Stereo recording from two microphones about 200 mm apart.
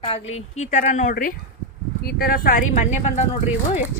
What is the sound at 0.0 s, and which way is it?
A woman's voice, 30° left (ahead or behind).